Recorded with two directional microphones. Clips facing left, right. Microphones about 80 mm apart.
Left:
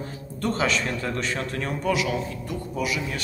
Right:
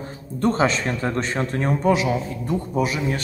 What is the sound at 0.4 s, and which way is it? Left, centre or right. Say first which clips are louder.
A man's voice: right 5 dB; right.